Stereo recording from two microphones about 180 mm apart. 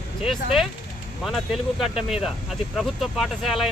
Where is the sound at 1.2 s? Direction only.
Centre (ahead or behind).